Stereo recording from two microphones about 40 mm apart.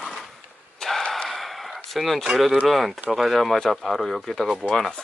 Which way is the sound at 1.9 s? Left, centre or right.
Centre.